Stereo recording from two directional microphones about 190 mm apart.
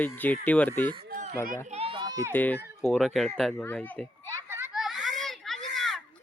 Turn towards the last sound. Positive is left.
turn(degrees=0)  # may be behind; listen again after turning